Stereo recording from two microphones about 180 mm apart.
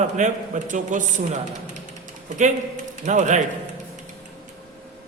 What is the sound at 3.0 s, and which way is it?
Speech, 45° right (ahead or behind).